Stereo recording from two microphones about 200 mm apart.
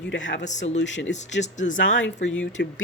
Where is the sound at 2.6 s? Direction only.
55° left (ahead or behind).